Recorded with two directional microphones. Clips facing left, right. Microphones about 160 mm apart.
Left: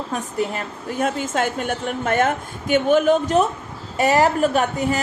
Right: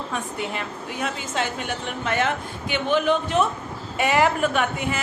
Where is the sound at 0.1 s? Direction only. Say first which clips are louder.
Left 7 dB; 40° left (ahead or behind).